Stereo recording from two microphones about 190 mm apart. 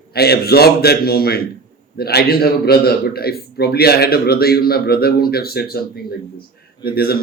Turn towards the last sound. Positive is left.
turn(degrees=55)  # may be behind; listen again after turning